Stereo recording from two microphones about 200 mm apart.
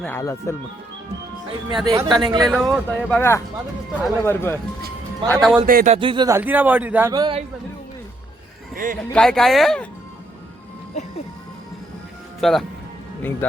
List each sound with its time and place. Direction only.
0.0 s speech: 10° left (ahead or behind)
1.9 s speech: 20° right (ahead or behind)
2.5 s speech: centre (ahead or behind)
5.3 s speech: centre (ahead or behind)
5.6 s speech: 40° right (ahead or behind)
6.0 s speech: 25° right (ahead or behind); by 7.1 s 10° right (ahead or behind)
7.1 s speech: 25° right (ahead or behind)
8.7 s speech: 45° right (ahead or behind)
9.1 s speech: centre (ahead or behind)
12.4 s speech: centre (ahead or behind)